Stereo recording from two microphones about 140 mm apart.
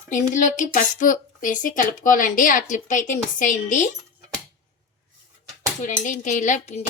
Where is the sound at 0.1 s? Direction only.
65° left (ahead or behind).